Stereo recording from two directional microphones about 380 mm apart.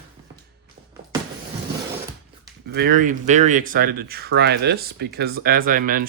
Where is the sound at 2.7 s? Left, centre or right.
Right.